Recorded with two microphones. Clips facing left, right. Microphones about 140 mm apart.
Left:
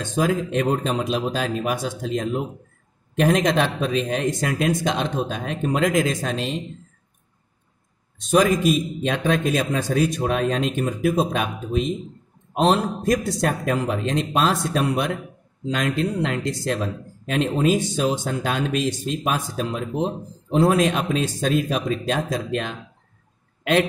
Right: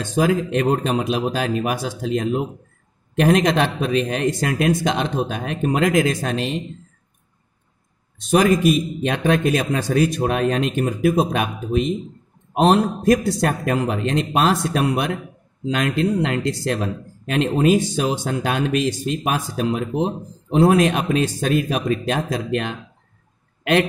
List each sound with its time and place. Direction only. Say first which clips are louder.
0.1 s a man's voice: right 3 dB; 65° right (ahead or behind)
8.3 s a man's voice: right 2 dB; 65° right (ahead or behind)